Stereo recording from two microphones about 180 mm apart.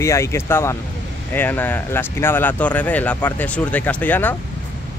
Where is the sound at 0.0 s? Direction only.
15° left (ahead or behind).